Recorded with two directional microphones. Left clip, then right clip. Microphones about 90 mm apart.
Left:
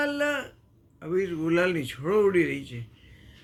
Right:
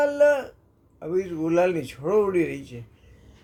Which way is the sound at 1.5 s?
40° right (ahead or behind).